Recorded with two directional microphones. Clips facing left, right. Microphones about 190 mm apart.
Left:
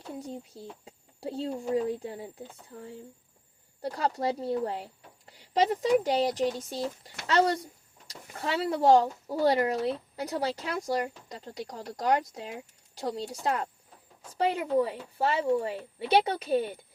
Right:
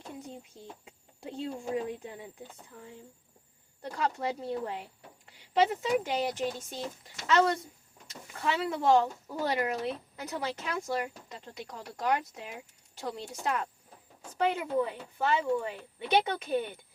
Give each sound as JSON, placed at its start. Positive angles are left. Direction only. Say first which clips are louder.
{"t": 0.1, "sound": "speech", "louder": "left 6 dB", "side_deg": 35}